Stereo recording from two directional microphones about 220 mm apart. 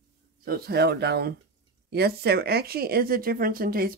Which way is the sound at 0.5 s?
45° right (ahead or behind).